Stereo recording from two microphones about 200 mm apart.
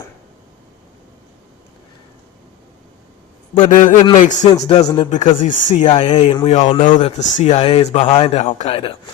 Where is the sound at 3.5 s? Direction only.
40° left (ahead or behind).